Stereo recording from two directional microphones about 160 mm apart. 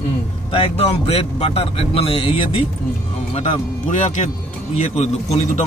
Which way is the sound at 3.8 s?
50° left (ahead or behind).